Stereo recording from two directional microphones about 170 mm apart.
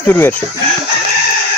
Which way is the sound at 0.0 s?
10° left (ahead or behind).